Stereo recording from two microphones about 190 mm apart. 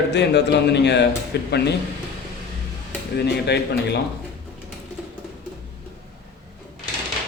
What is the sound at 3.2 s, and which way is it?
Speech, 60° left (ahead or behind).